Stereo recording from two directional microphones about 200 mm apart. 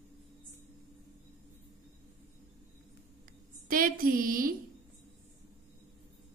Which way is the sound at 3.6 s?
45° right (ahead or behind).